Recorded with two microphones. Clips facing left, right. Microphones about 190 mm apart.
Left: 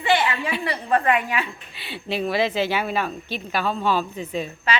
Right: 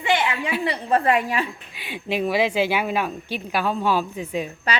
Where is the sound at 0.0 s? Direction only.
15° right (ahead or behind).